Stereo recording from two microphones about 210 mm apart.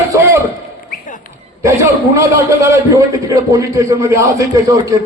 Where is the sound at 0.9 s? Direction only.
40° left (ahead or behind).